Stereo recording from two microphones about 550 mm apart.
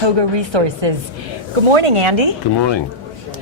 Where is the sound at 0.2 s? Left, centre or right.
Right.